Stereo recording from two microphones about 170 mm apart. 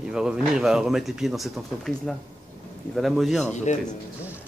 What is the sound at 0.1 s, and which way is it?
A man's voice, 5° right (ahead or behind).